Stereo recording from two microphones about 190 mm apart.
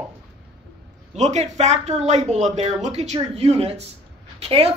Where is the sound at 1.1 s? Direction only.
35° right (ahead or behind).